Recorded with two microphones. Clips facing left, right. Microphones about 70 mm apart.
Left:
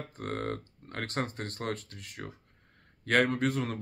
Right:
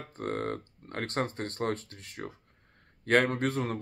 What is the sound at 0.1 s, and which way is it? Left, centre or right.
Speech, right.